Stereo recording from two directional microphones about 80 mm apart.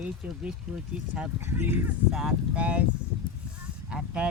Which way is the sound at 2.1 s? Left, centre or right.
Centre.